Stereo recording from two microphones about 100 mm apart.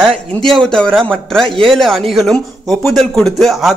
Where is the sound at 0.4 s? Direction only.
5° left (ahead or behind).